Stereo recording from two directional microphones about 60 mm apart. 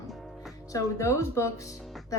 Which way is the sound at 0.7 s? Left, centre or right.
Left.